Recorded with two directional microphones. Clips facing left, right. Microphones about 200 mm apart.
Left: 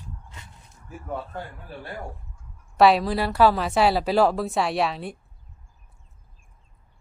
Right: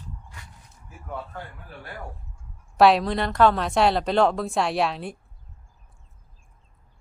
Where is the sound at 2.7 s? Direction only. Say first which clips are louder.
Even; centre (ahead or behind).